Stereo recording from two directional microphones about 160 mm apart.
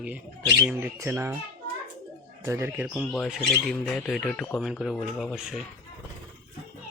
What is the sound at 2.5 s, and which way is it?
Speech, 15° right (ahead or behind).